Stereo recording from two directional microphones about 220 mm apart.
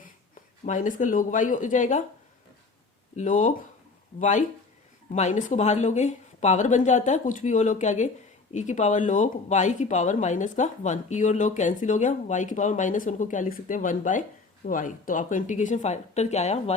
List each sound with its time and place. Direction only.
0.0 s speech: 35° left (ahead or behind)
3.2 s speech: 35° left (ahead or behind)